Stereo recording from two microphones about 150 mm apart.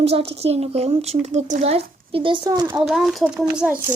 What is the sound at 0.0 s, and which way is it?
A woman's voice, 40° right (ahead or behind).